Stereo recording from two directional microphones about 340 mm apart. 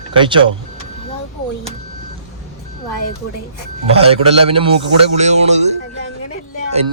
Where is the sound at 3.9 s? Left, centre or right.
Centre.